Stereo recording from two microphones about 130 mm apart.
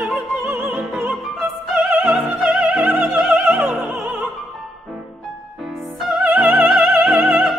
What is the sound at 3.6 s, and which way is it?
Opera, centre (ahead or behind).